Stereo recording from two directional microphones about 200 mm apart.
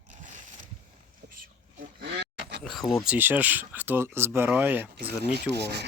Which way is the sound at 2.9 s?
5° right (ahead or behind).